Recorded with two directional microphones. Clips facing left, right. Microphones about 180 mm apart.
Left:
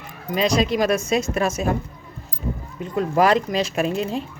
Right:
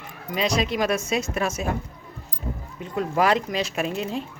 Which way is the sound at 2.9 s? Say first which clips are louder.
Left 4 dB; 40° left (ahead or behind).